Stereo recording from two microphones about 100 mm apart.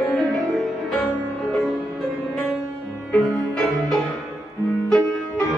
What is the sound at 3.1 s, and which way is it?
Music, 5° left (ahead or behind).